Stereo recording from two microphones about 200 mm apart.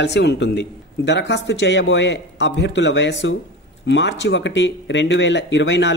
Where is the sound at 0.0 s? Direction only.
60° left (ahead or behind).